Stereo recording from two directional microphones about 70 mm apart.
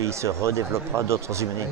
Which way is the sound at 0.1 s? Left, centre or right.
Right.